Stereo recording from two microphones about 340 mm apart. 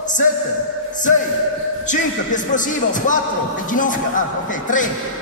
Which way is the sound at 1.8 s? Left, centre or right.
Left.